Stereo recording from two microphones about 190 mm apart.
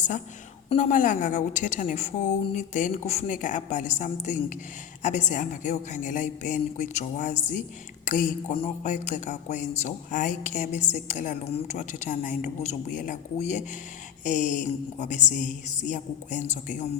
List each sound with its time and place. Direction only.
0.7 s a woman's voice: 40° left (ahead or behind)